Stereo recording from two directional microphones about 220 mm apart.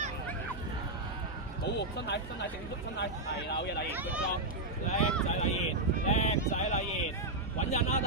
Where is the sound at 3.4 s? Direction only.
50° left (ahead or behind).